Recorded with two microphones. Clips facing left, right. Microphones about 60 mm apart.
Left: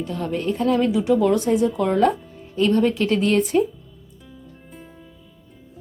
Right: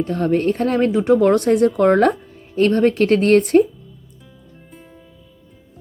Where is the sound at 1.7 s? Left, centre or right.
Right.